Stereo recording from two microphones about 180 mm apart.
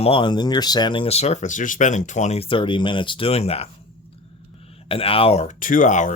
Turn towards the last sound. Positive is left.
turn(degrees=45)  # may be behind; listen again after turning